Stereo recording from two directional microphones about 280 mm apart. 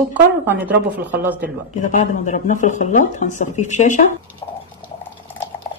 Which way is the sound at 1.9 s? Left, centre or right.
Left.